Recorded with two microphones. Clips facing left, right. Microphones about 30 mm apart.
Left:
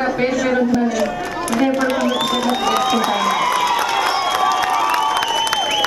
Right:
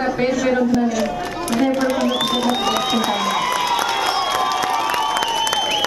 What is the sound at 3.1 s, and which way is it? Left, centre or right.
Speech, centre.